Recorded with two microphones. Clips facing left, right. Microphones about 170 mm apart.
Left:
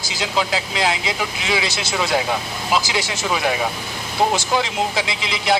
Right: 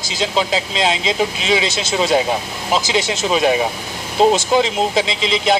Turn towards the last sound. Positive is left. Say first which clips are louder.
# right 5 dB
turn(degrees=-25)  # may be behind; listen again after turning